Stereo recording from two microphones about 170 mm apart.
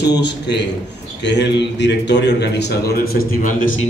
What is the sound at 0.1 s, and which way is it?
A man's voice, 85° left.